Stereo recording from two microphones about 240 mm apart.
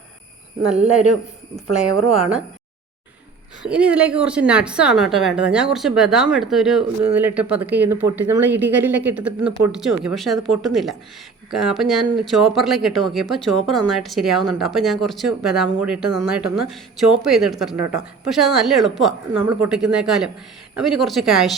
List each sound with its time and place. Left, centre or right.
1.6 s speech: right
3.7 s a woman's voice: centre